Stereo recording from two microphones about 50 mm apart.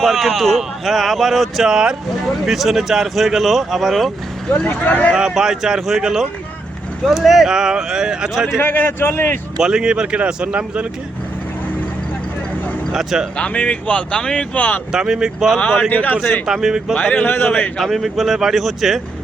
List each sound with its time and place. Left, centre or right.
0.0 s speech: centre
1.7 s speech: centre
2.2 s speech: centre
4.6 s speech: left
5.1 s speech: centre
8.6 s a man's voice: left
9.6 s speech: centre
12.9 s speech: centre
13.3 s speech: left
14.9 s speech: centre
15.9 s speech: left
16.5 s speech: centre
16.9 s speech: left
17.7 s speech: centre